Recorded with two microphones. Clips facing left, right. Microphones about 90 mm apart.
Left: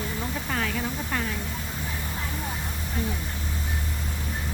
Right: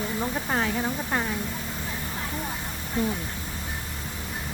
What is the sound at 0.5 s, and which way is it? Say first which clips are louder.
Speech: right 2 dB; 25° right (ahead or behind).